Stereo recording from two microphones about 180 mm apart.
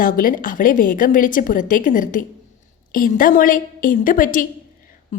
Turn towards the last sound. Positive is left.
turn(degrees=50)  # may be behind; listen again after turning